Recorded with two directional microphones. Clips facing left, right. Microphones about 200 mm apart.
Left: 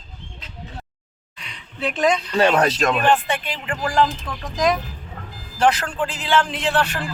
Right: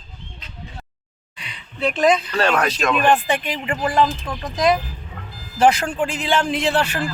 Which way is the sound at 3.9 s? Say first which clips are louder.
Left 1 dB; 5° right (ahead or behind).